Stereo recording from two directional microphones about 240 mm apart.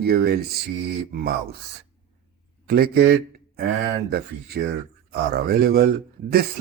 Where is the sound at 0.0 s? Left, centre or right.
Right.